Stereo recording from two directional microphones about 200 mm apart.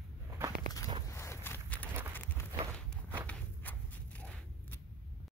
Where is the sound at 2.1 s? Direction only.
10° left (ahead or behind).